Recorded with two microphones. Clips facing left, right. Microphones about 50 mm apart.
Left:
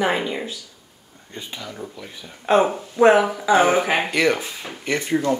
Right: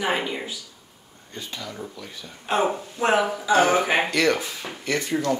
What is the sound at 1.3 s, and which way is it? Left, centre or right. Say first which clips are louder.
Speech: left 1 dB; centre.